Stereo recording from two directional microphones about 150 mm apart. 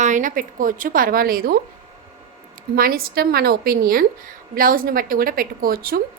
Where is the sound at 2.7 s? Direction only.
80° right.